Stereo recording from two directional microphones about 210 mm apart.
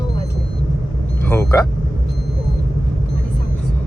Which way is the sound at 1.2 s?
10° left (ahead or behind).